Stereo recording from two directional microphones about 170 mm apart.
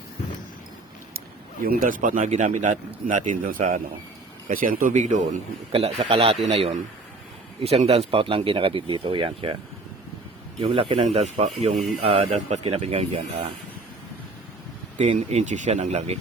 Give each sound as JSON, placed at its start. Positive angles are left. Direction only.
{"t": 1.6, "sound": "a man's voice", "side_deg": -55}
{"t": 10.6, "sound": "speech", "side_deg": -35}
{"t": 14.9, "sound": "speech", "side_deg": -40}